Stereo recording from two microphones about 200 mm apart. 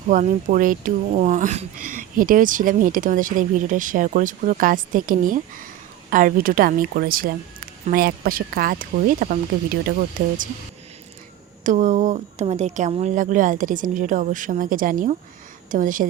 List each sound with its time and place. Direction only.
0.1 s speech: 40° right (ahead or behind)
11.6 s speech: 40° right (ahead or behind)